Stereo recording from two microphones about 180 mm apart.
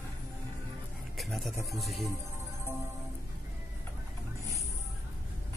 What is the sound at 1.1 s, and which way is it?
Speech, centre (ahead or behind).